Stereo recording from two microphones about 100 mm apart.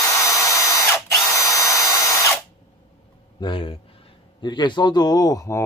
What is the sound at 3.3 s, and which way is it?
Speech, 55° left (ahead or behind).